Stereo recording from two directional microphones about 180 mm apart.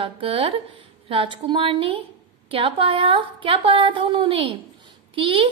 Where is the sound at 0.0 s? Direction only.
30° right (ahead or behind).